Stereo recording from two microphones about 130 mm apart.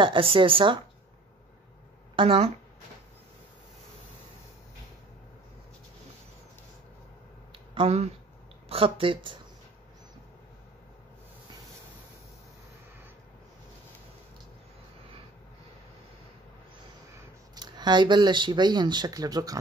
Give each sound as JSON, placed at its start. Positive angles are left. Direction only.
{"t": 0.0, "sound": "speech", "side_deg": -40}
{"t": 2.1, "sound": "speech", "side_deg": -45}
{"t": 7.5, "sound": "a sound", "side_deg": -45}
{"t": 8.6, "sound": "speech", "side_deg": -45}
{"t": 17.6, "sound": "speech", "side_deg": -35}